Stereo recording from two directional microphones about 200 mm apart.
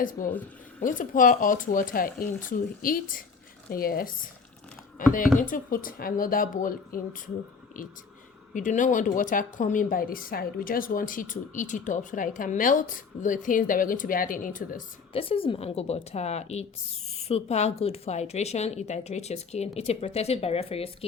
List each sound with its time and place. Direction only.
0.0 s a woman's voice: 40° left (ahead or behind)
5.1 s speech: 40° left (ahead or behind)
8.5 s a woman's voice: 40° left (ahead or behind)
15.1 s a woman's voice: 25° left (ahead or behind)